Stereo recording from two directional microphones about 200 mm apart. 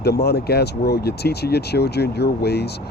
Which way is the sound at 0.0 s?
55° left (ahead or behind).